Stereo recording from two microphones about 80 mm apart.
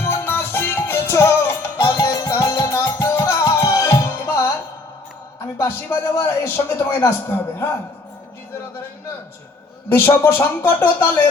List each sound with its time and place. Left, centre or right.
0.0 s music: left
2.0 s music: left
3.4 s music: left
5.5 s speech: left
9.9 s speech: left